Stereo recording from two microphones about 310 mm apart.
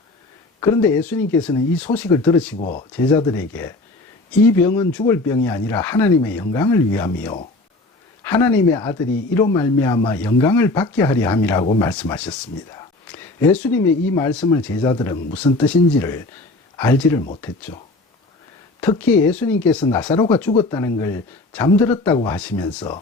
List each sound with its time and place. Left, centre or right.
0.6 s speech: centre
2.6 s speech: left
2.9 s speech: centre
11.6 s speech: centre
11.9 s speech: centre
18.8 s speech: centre